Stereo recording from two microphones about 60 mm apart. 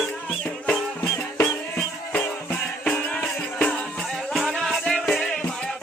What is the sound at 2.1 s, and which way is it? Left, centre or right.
Music, left.